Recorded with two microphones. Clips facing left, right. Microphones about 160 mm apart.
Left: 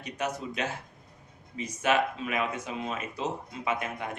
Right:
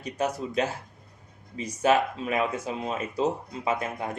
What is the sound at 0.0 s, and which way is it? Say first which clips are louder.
Speech: right 4 dB; 35° right (ahead or behind).